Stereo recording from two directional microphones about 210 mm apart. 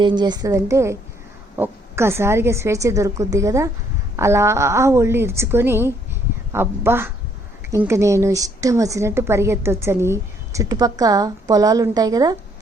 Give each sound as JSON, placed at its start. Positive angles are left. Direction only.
{"t": 0.0, "sound": "a woman's voice", "side_deg": -20}